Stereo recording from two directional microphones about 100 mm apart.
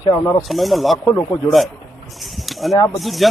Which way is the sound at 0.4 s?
Centre (ahead or behind).